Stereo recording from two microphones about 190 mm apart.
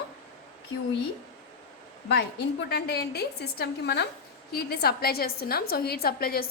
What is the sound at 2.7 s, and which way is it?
A woman's voice, 60° left (ahead or behind).